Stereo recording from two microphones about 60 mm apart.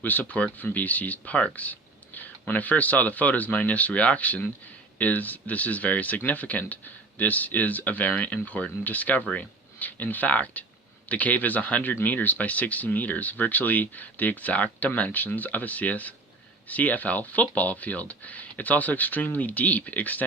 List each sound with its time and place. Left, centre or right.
0.0 s speech: left
1.5 s whispering: left
2.5 s speech: left